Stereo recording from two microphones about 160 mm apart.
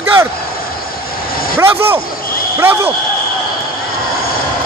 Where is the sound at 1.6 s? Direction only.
15° right (ahead or behind).